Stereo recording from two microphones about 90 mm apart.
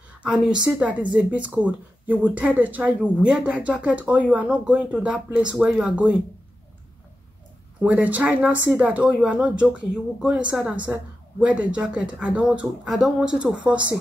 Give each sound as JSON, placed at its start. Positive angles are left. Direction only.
{"t": 0.2, "sound": "speech", "side_deg": -10}
{"t": 7.8, "sound": "speech", "side_deg": -15}